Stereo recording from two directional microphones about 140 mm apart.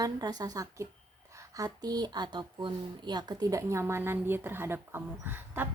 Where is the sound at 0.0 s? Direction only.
25° right (ahead or behind).